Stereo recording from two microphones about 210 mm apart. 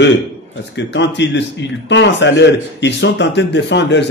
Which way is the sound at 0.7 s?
55° left (ahead or behind).